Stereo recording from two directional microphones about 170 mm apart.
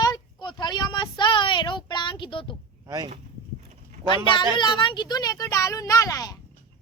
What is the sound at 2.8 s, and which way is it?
Speech, 20° right (ahead or behind).